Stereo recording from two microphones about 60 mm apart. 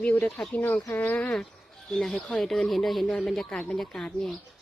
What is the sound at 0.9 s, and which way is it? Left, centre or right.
Speech, left.